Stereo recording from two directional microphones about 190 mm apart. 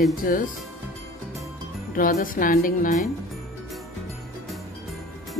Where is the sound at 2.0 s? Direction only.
45° left (ahead or behind).